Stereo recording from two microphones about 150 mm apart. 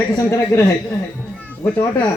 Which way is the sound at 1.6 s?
15° left (ahead or behind).